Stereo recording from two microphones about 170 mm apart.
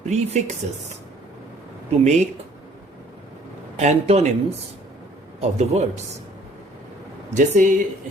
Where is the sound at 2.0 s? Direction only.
40° right (ahead or behind).